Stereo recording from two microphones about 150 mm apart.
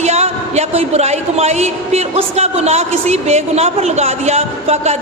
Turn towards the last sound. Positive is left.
turn(degrees=-45)  # may be behind; listen again after turning